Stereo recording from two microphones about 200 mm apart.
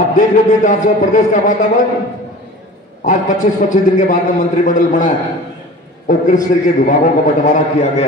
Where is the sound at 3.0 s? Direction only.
40° left (ahead or behind).